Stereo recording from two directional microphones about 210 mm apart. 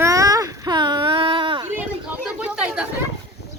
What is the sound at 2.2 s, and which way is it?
Chatter, 5° right (ahead or behind).